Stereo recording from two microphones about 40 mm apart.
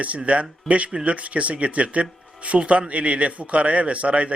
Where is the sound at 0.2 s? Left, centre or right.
Right.